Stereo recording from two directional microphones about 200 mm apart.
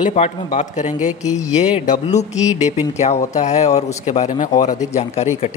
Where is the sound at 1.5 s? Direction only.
35° left (ahead or behind).